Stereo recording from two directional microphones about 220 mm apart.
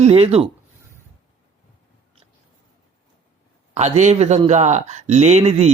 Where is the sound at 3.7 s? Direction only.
30° right (ahead or behind).